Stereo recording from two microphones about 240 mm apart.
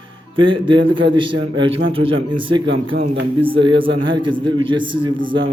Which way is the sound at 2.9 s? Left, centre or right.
Right.